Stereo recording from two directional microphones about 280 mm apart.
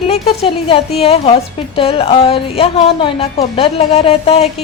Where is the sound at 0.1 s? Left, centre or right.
Left.